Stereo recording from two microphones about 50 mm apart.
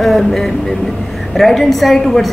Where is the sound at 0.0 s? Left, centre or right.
Centre.